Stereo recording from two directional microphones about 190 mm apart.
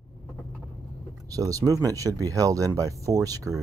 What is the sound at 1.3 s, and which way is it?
Speech, 20° right (ahead or behind).